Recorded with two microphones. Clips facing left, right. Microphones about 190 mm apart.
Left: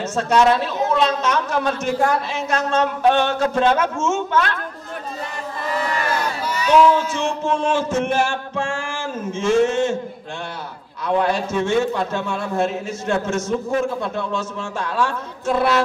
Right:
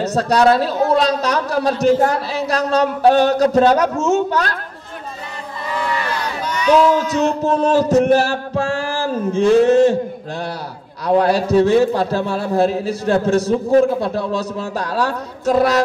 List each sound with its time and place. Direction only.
0.0 s a man's voice: 35° right (ahead or behind)
5.7 s a sound: 45° left (ahead or behind)
6.9 s a man's voice: 40° right (ahead or behind)
11.1 s a man's voice: 35° right (ahead or behind)